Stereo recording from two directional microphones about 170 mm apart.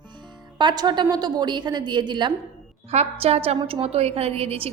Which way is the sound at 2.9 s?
40° right (ahead or behind).